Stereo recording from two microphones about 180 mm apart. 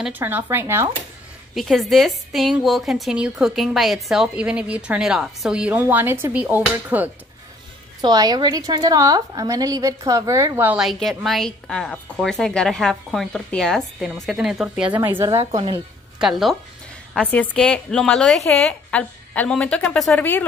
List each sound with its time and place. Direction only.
0.0 s speech: 10° right (ahead or behind)
1.5 s a woman's voice: centre (ahead or behind)
8.0 s a woman's voice: 25° right (ahead or behind); by 14.9 s centre (ahead or behind)
15.2 s a woman's voice: 25° right (ahead or behind)
16.2 s a woman's voice: centre (ahead or behind)